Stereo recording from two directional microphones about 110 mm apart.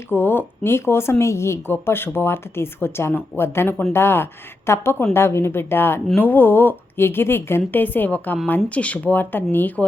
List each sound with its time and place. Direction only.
0.1 s speech: 20° left (ahead or behind)